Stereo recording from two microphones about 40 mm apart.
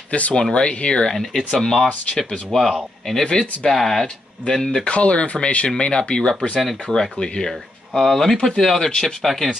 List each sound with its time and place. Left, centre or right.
0.1 s speech: left
0.4 s speech: left
1.1 s speech: centre
3.3 s speech: left
3.7 s speech: centre
4.8 s speech: left
7.9 s speech: centre